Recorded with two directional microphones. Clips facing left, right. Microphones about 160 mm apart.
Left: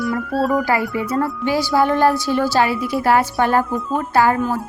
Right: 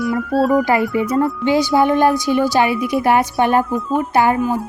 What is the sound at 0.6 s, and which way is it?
Music, 20° right (ahead or behind).